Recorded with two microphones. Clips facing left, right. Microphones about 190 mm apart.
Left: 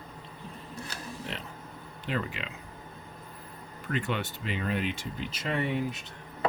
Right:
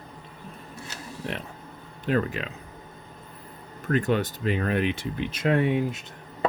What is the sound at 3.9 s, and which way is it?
Speech, 40° right (ahead or behind).